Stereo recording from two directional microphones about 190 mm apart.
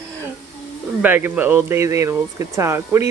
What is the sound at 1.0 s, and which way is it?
Speech, 10° right (ahead or behind).